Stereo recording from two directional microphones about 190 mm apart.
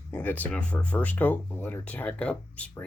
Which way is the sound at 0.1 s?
10° left (ahead or behind).